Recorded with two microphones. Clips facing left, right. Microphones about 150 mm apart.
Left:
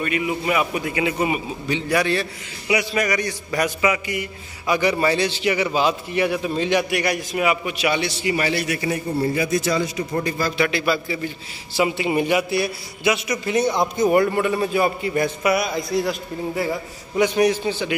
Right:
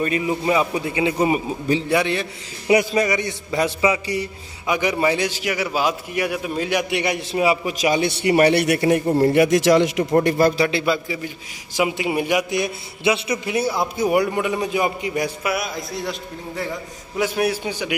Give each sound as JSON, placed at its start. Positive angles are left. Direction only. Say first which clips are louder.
{"t": 0.0, "sound": "a man's voice", "louder": "right 2 dB", "side_deg": -35}
{"t": 2.0, "sound": "a man's voice", "louder": "even", "side_deg": -20}
{"t": 2.7, "sound": "a man's voice", "louder": "right 5 dB", "side_deg": -45}
{"t": 3.0, "sound": "a man's voice", "louder": "right 2 dB", "side_deg": -25}
{"t": 4.6, "sound": "a man's voice", "louder": "left 1 dB", "side_deg": -15}
{"t": 6.9, "sound": "a man's voice", "louder": "even", "side_deg": -25}
{"t": 8.1, "sound": "a man's voice", "louder": "right 7 dB", "side_deg": -60}
{"t": 9.3, "sound": "a man's voice", "louder": "right 8 dB", "side_deg": -75}
{"t": 10.2, "sound": "a man's voice", "louder": "right 7 dB", "side_deg": -65}
{"t": 10.6, "sound": "a man's voice", "louder": "right 1 dB", "side_deg": -25}
{"t": 11.7, "sound": "a man's voice", "louder": "left 1 dB", "side_deg": -10}
{"t": 13.5, "sound": "a man's voice", "louder": "left 3 dB", "side_deg": -5}
{"t": 15.4, "sound": "a man's voice", "louder": "left 4 dB", "side_deg": 0}
{"t": 17.2, "sound": "a man's voice", "louder": "left 3 dB", "side_deg": -5}